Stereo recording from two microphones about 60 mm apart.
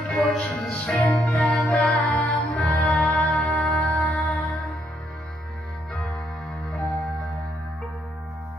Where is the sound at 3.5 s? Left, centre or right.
Left.